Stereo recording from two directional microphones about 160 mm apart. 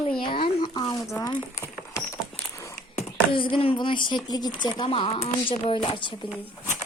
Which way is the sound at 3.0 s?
35° left (ahead or behind).